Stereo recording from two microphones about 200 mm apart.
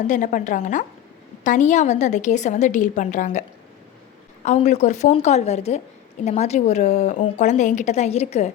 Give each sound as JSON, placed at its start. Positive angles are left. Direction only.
{"t": 0.1, "sound": "a woman's voice", "side_deg": 40}
{"t": 4.4, "sound": "a woman's voice", "side_deg": 35}